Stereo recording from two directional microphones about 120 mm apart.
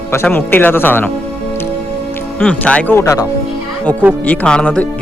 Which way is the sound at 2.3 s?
10° left (ahead or behind).